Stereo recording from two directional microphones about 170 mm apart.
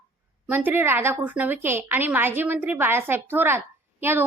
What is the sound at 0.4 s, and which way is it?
A woman's voice, 10° right (ahead or behind).